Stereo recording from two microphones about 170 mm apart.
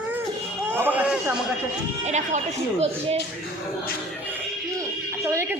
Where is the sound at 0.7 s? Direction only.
10° right (ahead or behind).